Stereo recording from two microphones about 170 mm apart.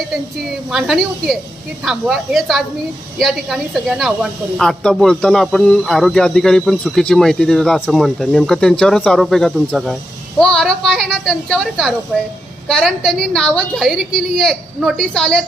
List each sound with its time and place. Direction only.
0.7 s speech: centre (ahead or behind)